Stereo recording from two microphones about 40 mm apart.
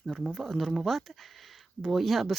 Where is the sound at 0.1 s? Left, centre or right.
Centre.